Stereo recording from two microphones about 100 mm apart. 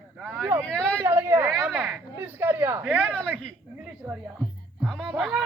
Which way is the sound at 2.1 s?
20° right (ahead or behind).